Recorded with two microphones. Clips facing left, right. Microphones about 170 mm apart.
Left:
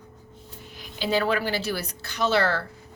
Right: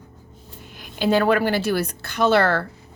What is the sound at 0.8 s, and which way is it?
A woman's voice, 55° right (ahead or behind).